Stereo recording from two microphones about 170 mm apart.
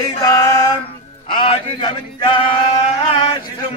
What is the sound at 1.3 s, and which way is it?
Chant, 30° left (ahead or behind).